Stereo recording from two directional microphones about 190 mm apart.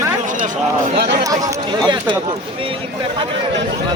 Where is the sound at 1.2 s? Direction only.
20° right (ahead or behind).